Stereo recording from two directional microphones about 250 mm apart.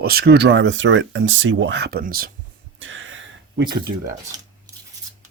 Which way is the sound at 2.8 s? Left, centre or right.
Right.